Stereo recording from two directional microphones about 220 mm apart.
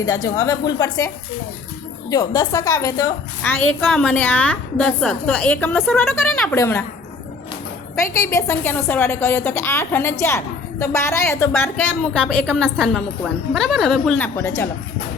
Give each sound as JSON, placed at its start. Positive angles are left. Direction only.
{"t": 0.0, "sound": "a woman's voice", "side_deg": 15}
{"t": 7.9, "sound": "a woman's voice", "side_deg": 15}